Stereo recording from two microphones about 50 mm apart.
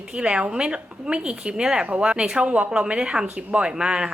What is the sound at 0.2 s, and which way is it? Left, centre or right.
A woman's voice, right.